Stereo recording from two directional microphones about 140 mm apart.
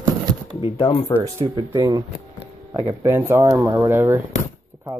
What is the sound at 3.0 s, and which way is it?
Speech, 20° right (ahead or behind).